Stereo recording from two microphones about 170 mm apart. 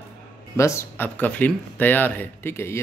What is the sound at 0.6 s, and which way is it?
Speech, 15° left (ahead or behind).